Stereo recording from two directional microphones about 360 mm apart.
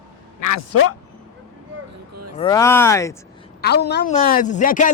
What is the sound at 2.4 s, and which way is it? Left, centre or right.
Speech, centre.